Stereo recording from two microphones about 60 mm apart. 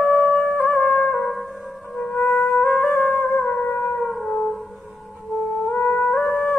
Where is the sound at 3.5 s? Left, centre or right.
Centre.